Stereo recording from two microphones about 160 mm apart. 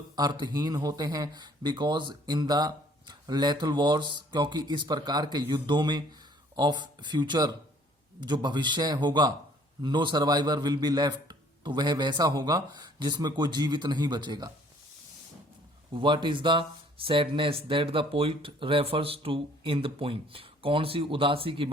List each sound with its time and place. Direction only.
0.2 s speech: 25° right (ahead or behind)
15.9 s speech: 30° right (ahead or behind)